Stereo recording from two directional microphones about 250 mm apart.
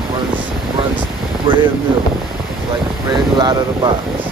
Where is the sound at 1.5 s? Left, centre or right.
Centre.